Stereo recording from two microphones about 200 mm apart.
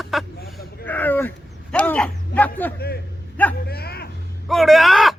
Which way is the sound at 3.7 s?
50° left (ahead or behind).